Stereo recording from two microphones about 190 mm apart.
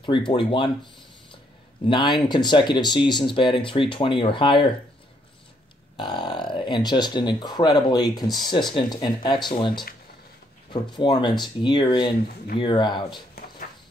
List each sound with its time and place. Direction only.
0.0 s speech: 25° left (ahead or behind)
1.9 s speech: 25° left (ahead or behind)
5.9 s speech: 25° left (ahead or behind)